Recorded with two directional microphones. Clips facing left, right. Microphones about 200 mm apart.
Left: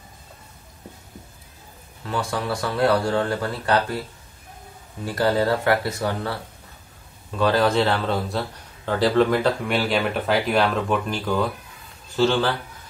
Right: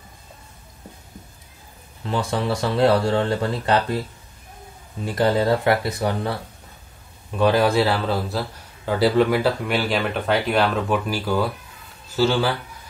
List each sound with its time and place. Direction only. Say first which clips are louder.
2.0 s speech: right 3 dB; 25° right (ahead or behind)
5.0 s a man's voice: right 1 dB; 20° right (ahead or behind)